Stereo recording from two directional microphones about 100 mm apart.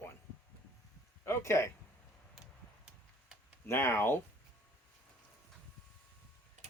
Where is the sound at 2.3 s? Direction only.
5° right (ahead or behind).